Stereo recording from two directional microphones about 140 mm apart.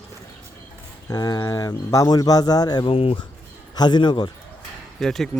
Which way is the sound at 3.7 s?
30° left (ahead or behind).